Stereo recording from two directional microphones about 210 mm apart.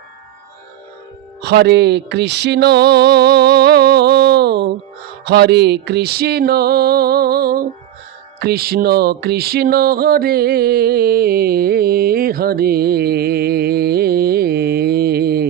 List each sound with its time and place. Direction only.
1.4 s music: 50° right (ahead or behind)